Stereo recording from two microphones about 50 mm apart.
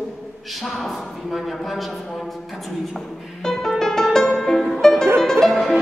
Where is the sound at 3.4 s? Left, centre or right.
Centre.